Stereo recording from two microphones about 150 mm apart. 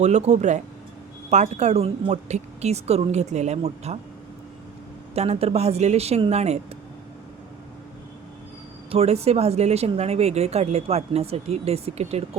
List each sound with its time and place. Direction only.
0.0 s speech: 50° right (ahead or behind)
5.1 s speech: 45° right (ahead or behind)
8.9 s speech: 45° right (ahead or behind)